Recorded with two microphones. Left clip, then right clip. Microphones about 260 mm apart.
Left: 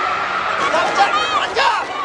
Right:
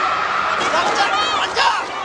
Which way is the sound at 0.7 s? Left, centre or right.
Centre.